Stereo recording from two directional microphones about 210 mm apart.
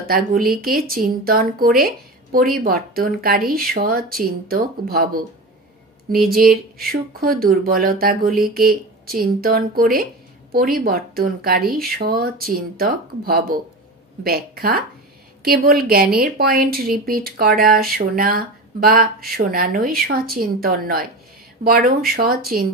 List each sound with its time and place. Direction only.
0.1 s speech: 45° right (ahead or behind)
6.3 s speech: 45° right (ahead or behind)